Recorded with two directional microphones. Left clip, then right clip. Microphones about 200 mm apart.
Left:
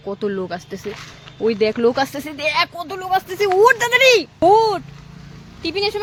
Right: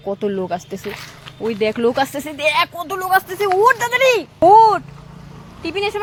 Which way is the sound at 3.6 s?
25° left (ahead or behind).